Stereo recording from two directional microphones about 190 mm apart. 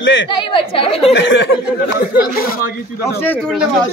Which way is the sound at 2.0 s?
50° left (ahead or behind).